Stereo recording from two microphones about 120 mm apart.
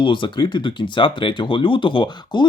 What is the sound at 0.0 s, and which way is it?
Speech, 40° left (ahead or behind).